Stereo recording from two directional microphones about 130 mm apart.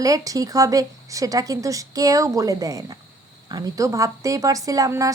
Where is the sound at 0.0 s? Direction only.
25° right (ahead or behind).